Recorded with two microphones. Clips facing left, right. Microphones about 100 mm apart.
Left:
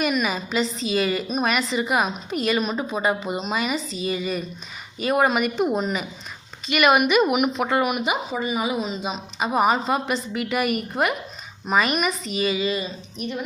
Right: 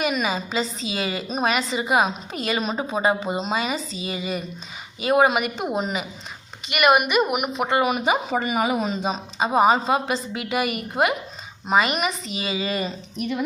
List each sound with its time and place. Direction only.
0.0 s a woman's voice: 25° right (ahead or behind)
6.7 s a woman's voice: 5° right (ahead or behind)
7.8 s a woman's voice: 30° right (ahead or behind)
8.3 s a woman's voice: 55° right (ahead or behind)
9.0 s a woman's voice: 35° right (ahead or behind)
12.6 s a woman's voice: 50° right (ahead or behind)